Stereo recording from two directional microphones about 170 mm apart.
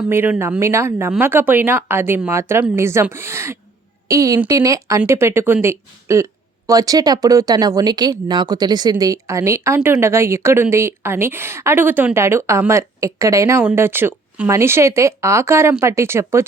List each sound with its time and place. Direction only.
0.1 s speech: 15° right (ahead or behind)